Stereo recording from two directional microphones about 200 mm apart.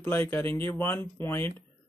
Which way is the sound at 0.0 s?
10° left (ahead or behind).